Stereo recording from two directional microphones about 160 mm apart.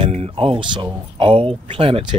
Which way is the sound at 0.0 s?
35° right (ahead or behind).